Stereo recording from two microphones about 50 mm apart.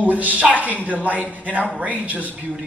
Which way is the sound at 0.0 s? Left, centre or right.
Right.